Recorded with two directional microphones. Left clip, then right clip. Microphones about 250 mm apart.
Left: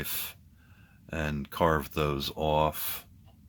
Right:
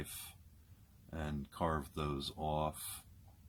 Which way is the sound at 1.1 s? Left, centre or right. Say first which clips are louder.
Left 12 dB; left.